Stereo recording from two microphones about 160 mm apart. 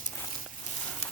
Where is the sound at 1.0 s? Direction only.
40° left (ahead or behind).